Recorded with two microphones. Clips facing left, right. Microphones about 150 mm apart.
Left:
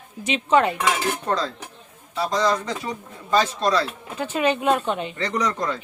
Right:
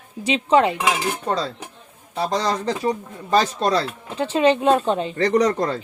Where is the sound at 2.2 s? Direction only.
30° right (ahead or behind).